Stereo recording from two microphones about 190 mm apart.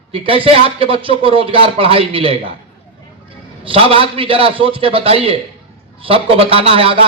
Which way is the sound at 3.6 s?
30° right (ahead or behind).